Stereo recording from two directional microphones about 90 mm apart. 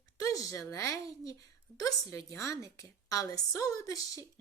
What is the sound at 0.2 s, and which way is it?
A woman's voice, 40° left (ahead or behind).